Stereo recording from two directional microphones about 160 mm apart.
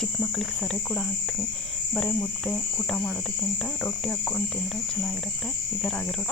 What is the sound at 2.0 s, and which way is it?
Cricket, 10° left (ahead or behind).